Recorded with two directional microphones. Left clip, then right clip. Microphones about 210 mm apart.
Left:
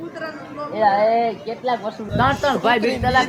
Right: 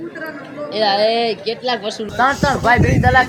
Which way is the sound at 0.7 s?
40° right (ahead or behind).